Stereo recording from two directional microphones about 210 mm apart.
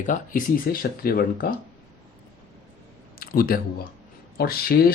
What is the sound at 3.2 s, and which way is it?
Speech, 45° left (ahead or behind).